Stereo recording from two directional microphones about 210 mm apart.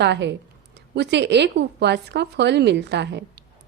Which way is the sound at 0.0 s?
55° right (ahead or behind).